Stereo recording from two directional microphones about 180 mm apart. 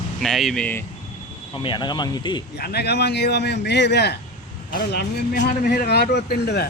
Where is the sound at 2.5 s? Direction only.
65° left (ahead or behind).